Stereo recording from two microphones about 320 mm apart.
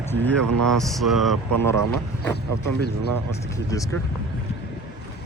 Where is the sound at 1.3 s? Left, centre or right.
Right.